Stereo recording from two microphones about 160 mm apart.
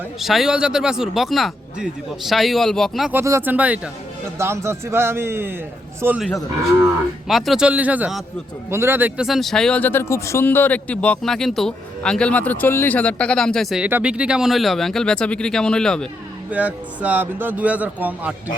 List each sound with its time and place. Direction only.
0.2 s speech: centre (ahead or behind)
3.1 s a man's voice: 15° right (ahead or behind)
7.3 s speech: centre (ahead or behind)
16.5 s a man's voice: 10° right (ahead or behind)